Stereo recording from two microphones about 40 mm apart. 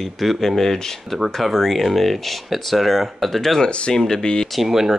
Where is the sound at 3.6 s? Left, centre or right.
Left.